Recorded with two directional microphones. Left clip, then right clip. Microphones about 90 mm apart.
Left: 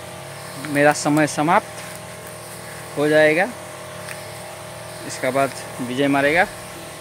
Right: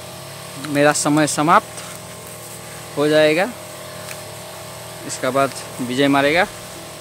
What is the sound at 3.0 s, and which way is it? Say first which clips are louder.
Speech: right 1 dB; 60° right (ahead or behind).